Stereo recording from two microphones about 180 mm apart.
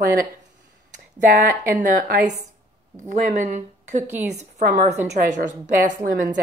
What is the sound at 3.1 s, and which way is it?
Speech, 45° right (ahead or behind).